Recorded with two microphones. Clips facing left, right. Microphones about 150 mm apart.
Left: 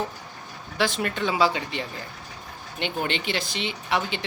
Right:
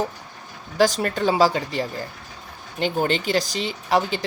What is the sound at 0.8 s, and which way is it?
Speech, 40° right (ahead or behind).